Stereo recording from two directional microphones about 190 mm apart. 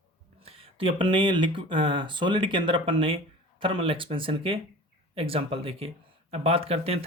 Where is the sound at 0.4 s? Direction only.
30° right (ahead or behind).